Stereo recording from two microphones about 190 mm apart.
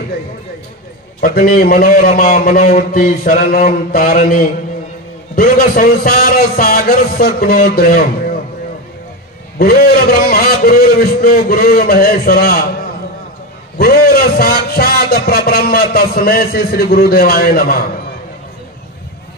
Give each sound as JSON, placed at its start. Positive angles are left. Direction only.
{"t": 1.2, "sound": "a man's voice", "side_deg": 50}
{"t": 9.6, "sound": "a man's voice", "side_deg": 55}
{"t": 13.7, "sound": "a man's voice", "side_deg": 55}